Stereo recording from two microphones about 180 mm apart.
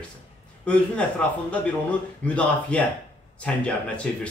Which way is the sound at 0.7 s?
5° left (ahead or behind).